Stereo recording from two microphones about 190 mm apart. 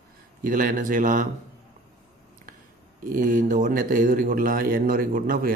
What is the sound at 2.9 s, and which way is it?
A man's voice, 45° right (ahead or behind).